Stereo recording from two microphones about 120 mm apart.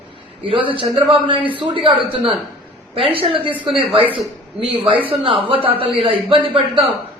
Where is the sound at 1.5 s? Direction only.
45° right (ahead or behind).